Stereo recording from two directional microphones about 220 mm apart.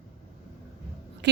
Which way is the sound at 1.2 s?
50° right (ahead or behind).